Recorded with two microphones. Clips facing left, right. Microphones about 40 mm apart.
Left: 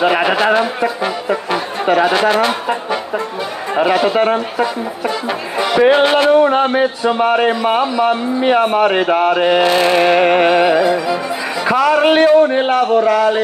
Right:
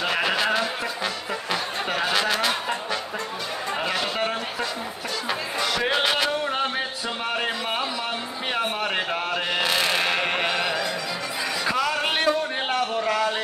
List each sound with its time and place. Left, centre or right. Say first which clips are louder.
0.0 s music: left 10 dB; left
3.7 s speech: left 14 dB; left